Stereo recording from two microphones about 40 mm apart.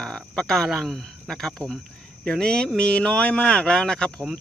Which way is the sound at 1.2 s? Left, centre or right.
Centre.